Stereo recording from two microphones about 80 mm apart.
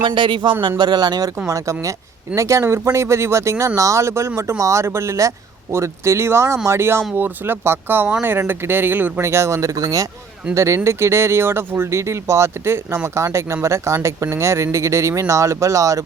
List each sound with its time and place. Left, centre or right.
0.0 s speech: right
0.8 s speech: right
1.5 s speech: right
9.2 s speech: right